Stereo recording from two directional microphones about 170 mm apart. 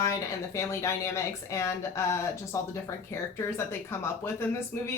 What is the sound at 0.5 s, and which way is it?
Speech, 15° left (ahead or behind).